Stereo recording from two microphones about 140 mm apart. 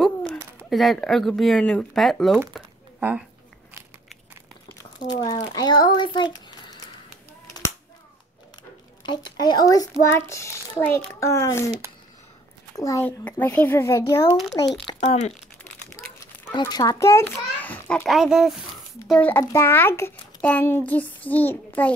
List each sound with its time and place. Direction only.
0.7 s speech: centre (ahead or behind)
3.0 s speech: 10° right (ahead or behind)
4.7 s a child's voice: 30° left (ahead or behind)
9.0 s speech: 30° left (ahead or behind)
10.8 s a child's voice: 10° left (ahead or behind)
11.1 s speech: 20° left (ahead or behind)
12.7 s speech: 25° left (ahead or behind)
13.0 s a child's voice: 10° left (ahead or behind)
14.9 s speech: 45° left (ahead or behind)
16.5 s speech: 30° left (ahead or behind); by 18.0 s 10° left (ahead or behind)
18.0 s speech: centre (ahead or behind)
19.0 s a child's voice: 10° left (ahead or behind)